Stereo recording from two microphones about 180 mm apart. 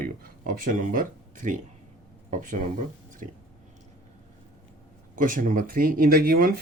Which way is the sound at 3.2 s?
40° right (ahead or behind).